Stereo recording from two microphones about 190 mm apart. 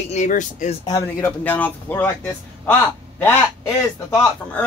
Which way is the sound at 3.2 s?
10° left (ahead or behind).